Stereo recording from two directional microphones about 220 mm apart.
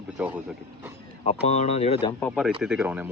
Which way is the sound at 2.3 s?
5° right (ahead or behind).